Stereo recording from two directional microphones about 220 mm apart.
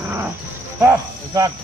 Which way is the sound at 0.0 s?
10° right (ahead or behind).